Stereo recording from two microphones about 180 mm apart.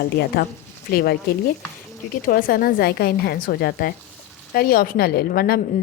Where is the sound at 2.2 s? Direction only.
55° left (ahead or behind).